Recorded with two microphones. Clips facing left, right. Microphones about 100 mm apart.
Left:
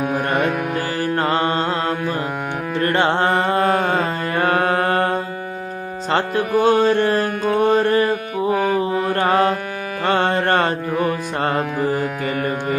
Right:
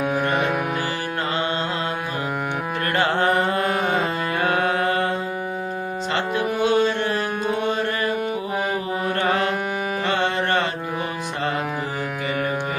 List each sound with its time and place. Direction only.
1.2 s music: 40° left (ahead or behind)
2.8 s mantra: 30° left (ahead or behind)
6.1 s music: 40° left (ahead or behind)